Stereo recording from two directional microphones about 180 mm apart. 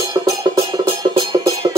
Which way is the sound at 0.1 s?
25° right (ahead or behind).